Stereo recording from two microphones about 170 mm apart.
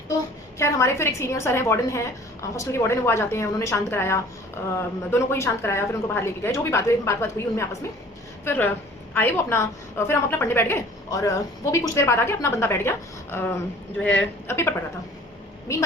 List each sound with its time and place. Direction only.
0.6 s a woman's voice: 15° left (ahead or behind)